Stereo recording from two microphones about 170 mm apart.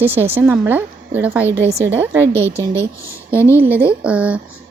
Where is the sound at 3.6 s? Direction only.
10° right (ahead or behind).